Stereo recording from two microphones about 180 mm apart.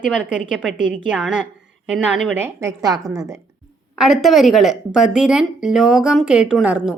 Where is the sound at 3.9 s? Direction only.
Centre (ahead or behind).